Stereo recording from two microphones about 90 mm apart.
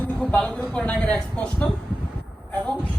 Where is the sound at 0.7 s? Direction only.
15° left (ahead or behind).